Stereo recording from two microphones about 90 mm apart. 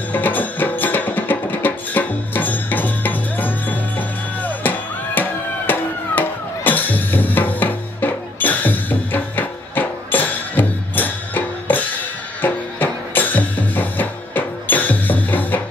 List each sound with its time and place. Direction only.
0.1 s music: 20° left (ahead or behind)